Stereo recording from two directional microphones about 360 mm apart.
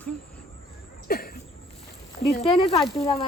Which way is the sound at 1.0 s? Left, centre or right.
Left.